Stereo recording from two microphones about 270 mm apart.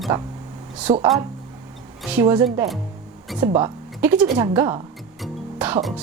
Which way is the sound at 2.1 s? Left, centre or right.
Centre.